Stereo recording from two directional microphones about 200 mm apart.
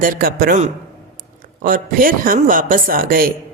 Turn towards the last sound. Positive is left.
turn(degrees=-45)  # may be behind; listen again after turning